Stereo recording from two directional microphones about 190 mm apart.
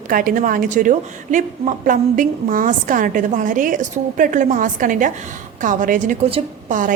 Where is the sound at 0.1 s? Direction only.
45° right (ahead or behind).